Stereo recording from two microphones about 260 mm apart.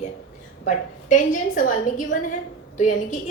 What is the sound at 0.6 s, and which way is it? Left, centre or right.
A woman's voice, left.